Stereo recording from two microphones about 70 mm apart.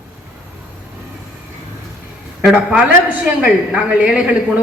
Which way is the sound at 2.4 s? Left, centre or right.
Centre.